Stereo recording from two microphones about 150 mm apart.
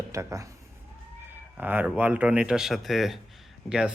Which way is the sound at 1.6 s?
10° right (ahead or behind).